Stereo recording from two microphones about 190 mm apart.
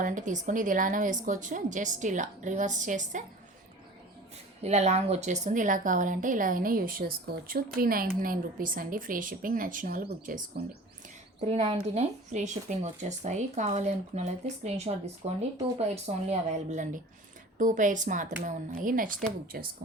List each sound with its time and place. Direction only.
0.0 s speech: 40° right (ahead or behind)
4.6 s a woman's voice: 35° right (ahead or behind)
16.3 s a woman's voice: 40° right (ahead or behind)